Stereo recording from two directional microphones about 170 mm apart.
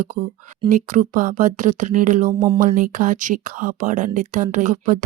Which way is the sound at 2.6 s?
50° right (ahead or behind).